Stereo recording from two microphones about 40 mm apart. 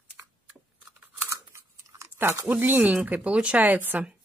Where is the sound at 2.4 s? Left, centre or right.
Right.